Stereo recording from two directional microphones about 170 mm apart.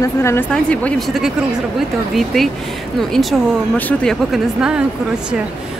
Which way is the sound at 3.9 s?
5° left (ahead or behind).